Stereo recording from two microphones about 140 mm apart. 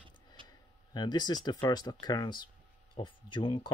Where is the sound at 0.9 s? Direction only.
30° left (ahead or behind).